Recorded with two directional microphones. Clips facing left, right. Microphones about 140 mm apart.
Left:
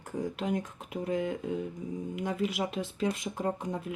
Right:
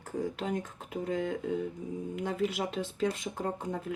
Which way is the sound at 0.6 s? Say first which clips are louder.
Even; 10° left (ahead or behind).